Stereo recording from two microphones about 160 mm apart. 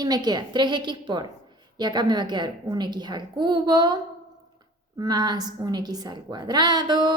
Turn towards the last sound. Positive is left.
turn(degrees=-25)  # may be behind; listen again after turning